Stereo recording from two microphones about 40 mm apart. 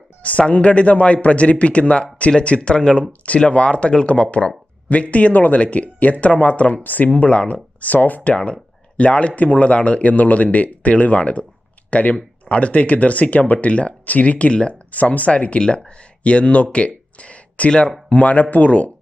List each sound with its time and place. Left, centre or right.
0.2 s speech: left
2.6 s speech: left
3.1 s speech: left
6.8 s speech: left
7.2 s speech: left
15.3 s speech: left
16.7 s a sound: left
17.7 s speech: left
18.1 s speech: left